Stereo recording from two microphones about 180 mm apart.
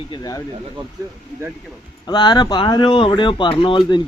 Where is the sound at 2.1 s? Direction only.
25° left (ahead or behind).